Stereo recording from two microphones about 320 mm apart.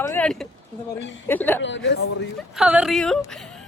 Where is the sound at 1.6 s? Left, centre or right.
Left.